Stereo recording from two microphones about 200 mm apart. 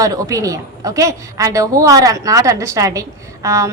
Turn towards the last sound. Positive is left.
turn(degrees=-15)  # may be behind; listen again after turning